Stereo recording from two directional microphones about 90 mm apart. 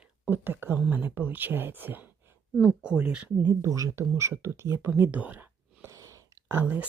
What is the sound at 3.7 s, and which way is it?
Speech, 40° right (ahead or behind).